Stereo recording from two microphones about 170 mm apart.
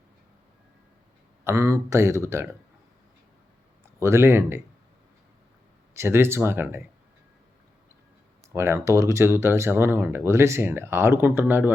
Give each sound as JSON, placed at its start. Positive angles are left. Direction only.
{"t": 1.5, "sound": "speech", "side_deg": -15}
{"t": 4.0, "sound": "speech", "side_deg": -15}
{"t": 5.9, "sound": "speech", "side_deg": -15}
{"t": 8.5, "sound": "speech", "side_deg": -15}